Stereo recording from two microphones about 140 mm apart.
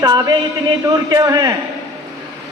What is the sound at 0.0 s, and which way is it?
A man's voice, 30° right (ahead or behind).